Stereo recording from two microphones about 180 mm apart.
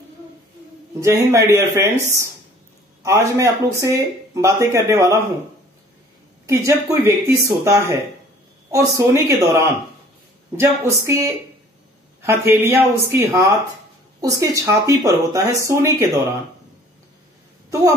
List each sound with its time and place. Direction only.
1.0 s speech: 15° right (ahead or behind)
6.4 s speech: 15° right (ahead or behind)